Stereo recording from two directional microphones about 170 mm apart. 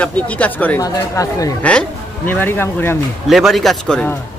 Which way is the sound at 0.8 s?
20° left (ahead or behind).